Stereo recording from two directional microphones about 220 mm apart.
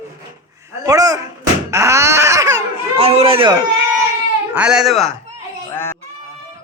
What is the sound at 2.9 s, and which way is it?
Speech, 25° right (ahead or behind).